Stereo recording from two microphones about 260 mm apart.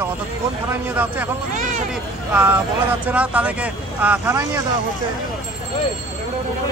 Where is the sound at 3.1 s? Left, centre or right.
Centre.